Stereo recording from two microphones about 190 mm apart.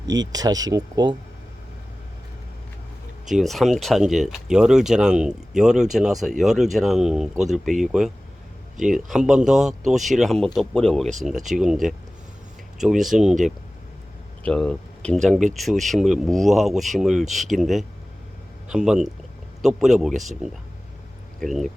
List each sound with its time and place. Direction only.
0.1 s speech: 20° right (ahead or behind)
3.2 s speech: centre (ahead or behind)
14.4 s speech: 5° left (ahead or behind)